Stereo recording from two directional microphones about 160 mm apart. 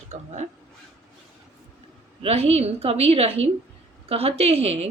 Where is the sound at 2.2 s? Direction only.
40° right (ahead or behind).